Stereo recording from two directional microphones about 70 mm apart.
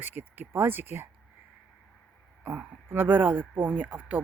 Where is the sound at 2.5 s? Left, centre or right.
Right.